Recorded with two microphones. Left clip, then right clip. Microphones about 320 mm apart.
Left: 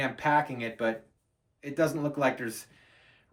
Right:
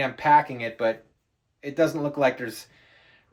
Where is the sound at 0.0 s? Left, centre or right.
Centre.